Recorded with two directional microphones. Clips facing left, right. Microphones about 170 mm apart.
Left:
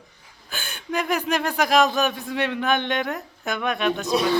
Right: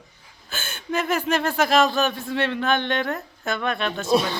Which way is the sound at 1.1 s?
15° left (ahead or behind).